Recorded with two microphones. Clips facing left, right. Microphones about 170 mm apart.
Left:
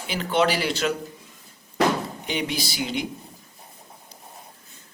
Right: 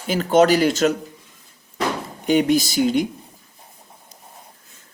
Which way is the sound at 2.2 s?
45° right (ahead or behind).